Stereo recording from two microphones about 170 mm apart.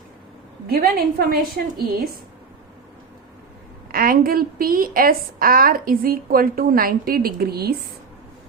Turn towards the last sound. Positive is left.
turn(degrees=-65)  # may be behind; listen again after turning